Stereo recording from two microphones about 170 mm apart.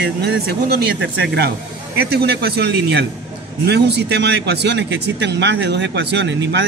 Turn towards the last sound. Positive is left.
turn(degrees=-90)